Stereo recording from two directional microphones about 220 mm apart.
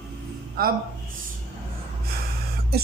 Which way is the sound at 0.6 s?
40° right (ahead or behind).